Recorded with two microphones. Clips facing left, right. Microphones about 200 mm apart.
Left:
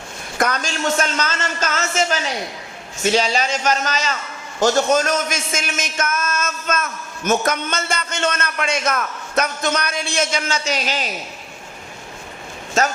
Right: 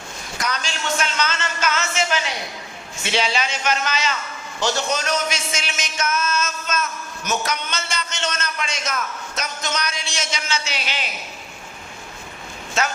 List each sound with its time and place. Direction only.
0.3 s a man's voice: 50° left (ahead or behind)
12.8 s a man's voice: 45° left (ahead or behind)